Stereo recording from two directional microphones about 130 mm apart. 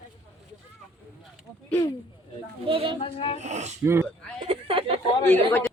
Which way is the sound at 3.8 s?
20° right (ahead or behind).